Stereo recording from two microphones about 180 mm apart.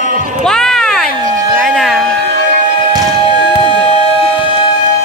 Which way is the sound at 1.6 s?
Centre (ahead or behind).